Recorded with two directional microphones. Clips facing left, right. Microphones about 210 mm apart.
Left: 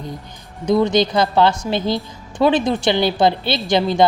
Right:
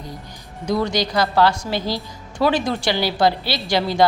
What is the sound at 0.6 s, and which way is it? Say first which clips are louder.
A woman's voice: left 6 dB; 20° left (ahead or behind).